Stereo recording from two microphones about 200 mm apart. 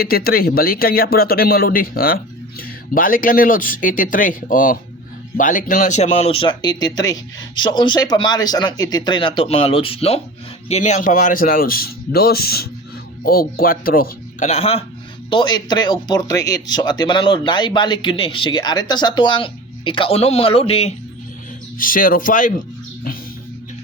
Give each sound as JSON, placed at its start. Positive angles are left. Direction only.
{"t": 0.0, "sound": "speech", "side_deg": 50}
{"t": 21.8, "sound": "speech", "side_deg": 45}